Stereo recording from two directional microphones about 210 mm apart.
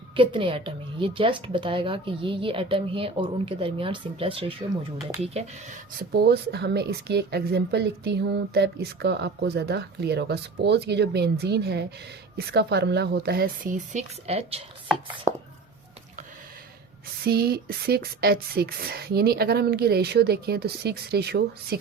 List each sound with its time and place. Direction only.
0.2 s a woman's voice: 25° right (ahead or behind)
6.1 s speech: 50° right (ahead or behind); by 14.6 s 30° right (ahead or behind)
15.3 s chopping: 15° right (ahead or behind)
17.2 s speech: 50° right (ahead or behind)